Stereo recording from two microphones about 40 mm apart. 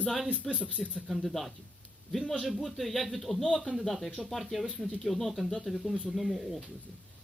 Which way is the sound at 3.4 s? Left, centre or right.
Left.